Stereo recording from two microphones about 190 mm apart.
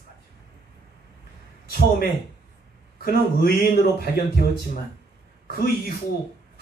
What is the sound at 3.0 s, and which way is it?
A man's voice, 50° left (ahead or behind).